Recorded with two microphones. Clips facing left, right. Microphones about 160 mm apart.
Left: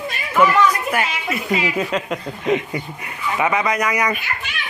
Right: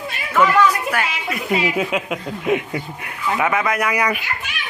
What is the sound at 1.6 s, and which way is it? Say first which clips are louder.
Speech: right 1 dB; 10° right (ahead or behind).